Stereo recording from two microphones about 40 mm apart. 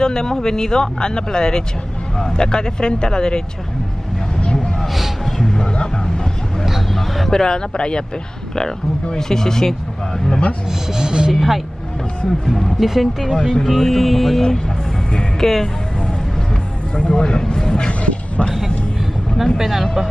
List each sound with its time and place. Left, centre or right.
0.0 s speech: centre
4.9 s music: centre
5.6 s a sound: centre
6.6 s a sound: centre
9.0 s speech: centre
10.9 s speech: centre
12.4 s speech: centre
15.1 s music: centre
17.1 s speech: centre
19.3 s speech: centre